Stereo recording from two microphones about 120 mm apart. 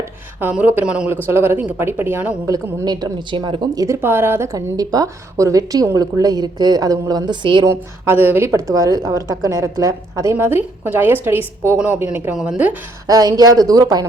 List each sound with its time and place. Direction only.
0.3 s a woman's voice: 15° right (ahead or behind)
2.5 s a woman's voice: 35° right (ahead or behind)
3.8 s a woman's voice: 20° right (ahead or behind); by 7.6 s 40° right (ahead or behind)
7.6 s a woman's voice: 20° right (ahead or behind)
12.3 s speech: 5° right (ahead or behind)
13.1 s a woman's voice: 30° right (ahead or behind)